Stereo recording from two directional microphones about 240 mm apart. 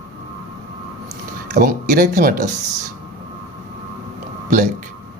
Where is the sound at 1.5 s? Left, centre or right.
Right.